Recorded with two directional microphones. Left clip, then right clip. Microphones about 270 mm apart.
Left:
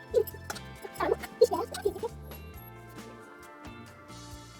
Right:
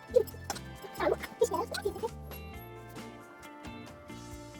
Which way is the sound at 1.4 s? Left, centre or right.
Centre.